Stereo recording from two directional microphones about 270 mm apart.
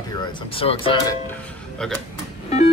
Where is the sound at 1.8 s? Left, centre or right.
Centre.